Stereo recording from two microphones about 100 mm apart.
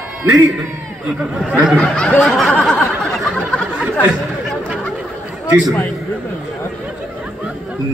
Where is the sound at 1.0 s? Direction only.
10° right (ahead or behind).